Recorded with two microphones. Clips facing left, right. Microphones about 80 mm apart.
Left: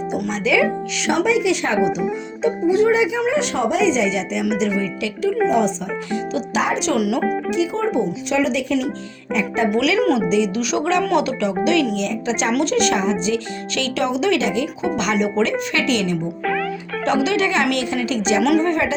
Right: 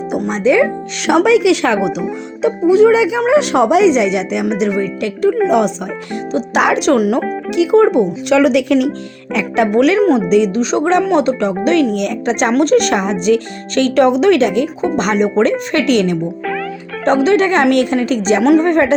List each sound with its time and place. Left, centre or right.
0.3 s speech: right
1.0 s speech: right
5.5 s speech: right
6.6 s speech: right
6.9 s speech: right
7.2 s speech: centre
7.5 s speech: right
9.3 s speech: right
9.7 s speech: right
10.2 s speech: right
10.5 s speech: right
12.0 s speech: right
16.4 s music: centre
17.2 s speech: right